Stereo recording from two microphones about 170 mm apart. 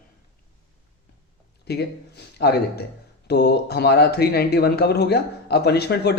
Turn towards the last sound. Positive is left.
turn(degrees=75)  # may be behind; listen again after turning